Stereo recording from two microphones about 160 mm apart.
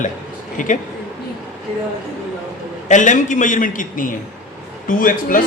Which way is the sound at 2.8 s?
50° left (ahead or behind).